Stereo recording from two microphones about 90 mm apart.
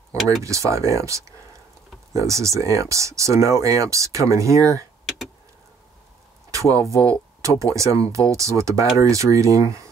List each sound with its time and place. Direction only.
0.4 s speech: 35° right (ahead or behind)
6.5 s a sound: 35° right (ahead or behind)
7.1 s speech: 35° right (ahead or behind)